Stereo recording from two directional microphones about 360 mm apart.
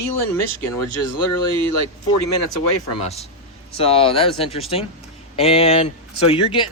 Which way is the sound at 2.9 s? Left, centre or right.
Centre.